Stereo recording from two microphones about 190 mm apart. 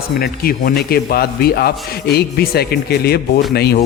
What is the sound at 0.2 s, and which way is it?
Speech, 50° left (ahead or behind).